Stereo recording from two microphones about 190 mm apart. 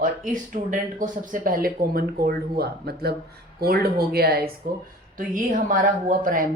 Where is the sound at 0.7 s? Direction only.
45° right (ahead or behind).